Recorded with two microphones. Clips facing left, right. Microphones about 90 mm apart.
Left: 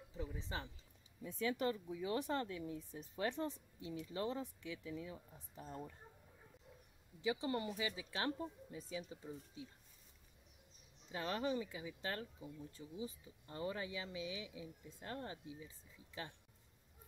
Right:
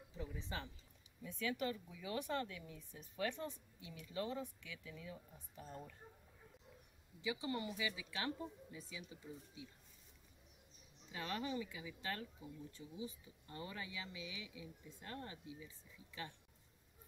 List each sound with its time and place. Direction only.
0.2 s speech: 25° left (ahead or behind)
7.3 s speech: 35° left (ahead or behind)
11.1 s speech: 30° left (ahead or behind)